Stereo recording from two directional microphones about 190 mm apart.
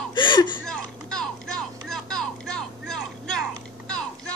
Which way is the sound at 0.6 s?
5° left (ahead or behind).